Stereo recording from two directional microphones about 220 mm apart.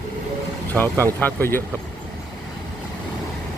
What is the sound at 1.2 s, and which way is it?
Speech, 10° left (ahead or behind).